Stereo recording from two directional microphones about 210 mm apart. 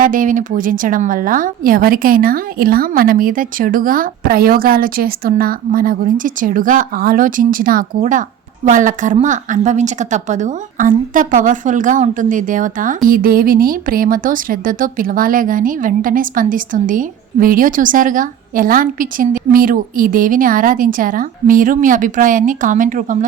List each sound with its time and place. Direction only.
0.0 s speech: 40° right (ahead or behind)